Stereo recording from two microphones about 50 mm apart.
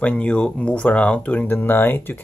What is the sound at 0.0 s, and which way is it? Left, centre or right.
Speech, left.